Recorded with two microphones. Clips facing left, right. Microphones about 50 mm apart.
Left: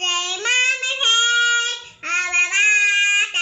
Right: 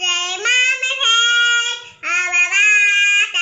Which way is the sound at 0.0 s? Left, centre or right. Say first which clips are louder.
Right 3 dB; right.